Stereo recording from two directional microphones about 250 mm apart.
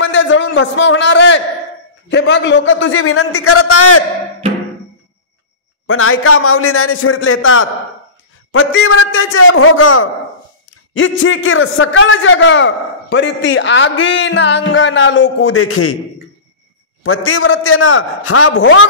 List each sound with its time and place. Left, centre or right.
0.0 s a man's voice: left
5.9 s a man's voice: left
17.0 s a man's voice: left